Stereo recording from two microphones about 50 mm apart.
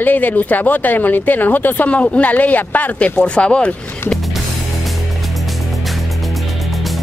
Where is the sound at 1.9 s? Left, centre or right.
Left.